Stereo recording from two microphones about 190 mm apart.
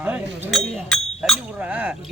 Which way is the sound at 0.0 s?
5° right (ahead or behind).